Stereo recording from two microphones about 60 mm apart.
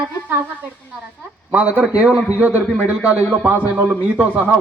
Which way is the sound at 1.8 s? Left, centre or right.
Centre.